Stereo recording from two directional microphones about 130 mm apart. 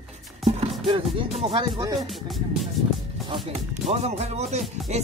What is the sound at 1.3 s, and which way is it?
Speech, 50° right (ahead or behind).